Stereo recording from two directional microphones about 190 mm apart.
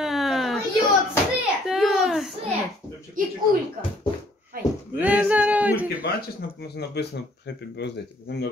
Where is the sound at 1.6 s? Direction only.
Centre (ahead or behind).